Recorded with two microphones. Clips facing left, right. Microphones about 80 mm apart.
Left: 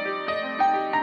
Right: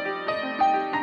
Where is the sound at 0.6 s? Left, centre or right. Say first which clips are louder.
Even; left.